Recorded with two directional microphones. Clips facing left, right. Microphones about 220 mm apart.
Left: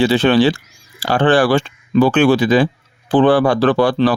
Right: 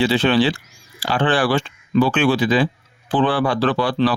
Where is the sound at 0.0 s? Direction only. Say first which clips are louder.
Left 4 dB; 45° left (ahead or behind).